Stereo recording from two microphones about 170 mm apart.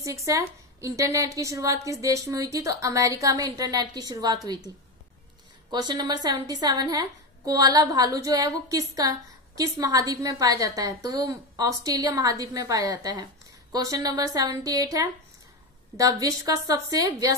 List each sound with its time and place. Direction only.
0.0 s a woman's voice: 20° right (ahead or behind)
5.7 s a woman's voice: 25° right (ahead or behind)